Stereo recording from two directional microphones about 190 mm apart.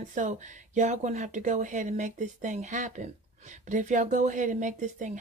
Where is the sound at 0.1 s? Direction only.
40° right (ahead or behind).